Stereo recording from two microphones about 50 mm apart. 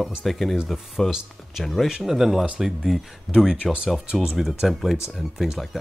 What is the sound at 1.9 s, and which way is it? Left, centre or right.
Speech, centre.